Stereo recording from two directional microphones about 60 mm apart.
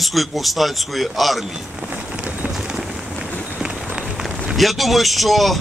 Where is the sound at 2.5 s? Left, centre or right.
Centre.